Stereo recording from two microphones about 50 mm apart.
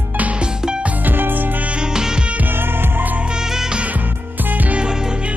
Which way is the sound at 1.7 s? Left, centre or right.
Centre.